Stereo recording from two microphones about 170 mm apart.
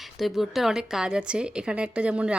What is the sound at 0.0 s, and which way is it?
A woman's voice, centre (ahead or behind).